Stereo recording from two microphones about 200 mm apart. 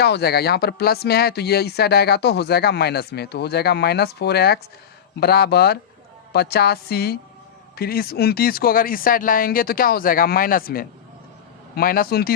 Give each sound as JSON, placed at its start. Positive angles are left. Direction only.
{"t": 0.0, "sound": "speech", "side_deg": 55}